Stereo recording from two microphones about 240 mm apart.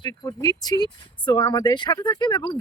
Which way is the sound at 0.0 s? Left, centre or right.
Centre.